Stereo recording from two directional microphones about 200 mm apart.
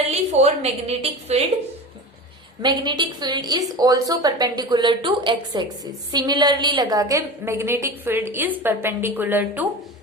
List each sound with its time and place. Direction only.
0.1 s a woman's voice: 30° right (ahead or behind)
2.6 s a woman's voice: 20° right (ahead or behind)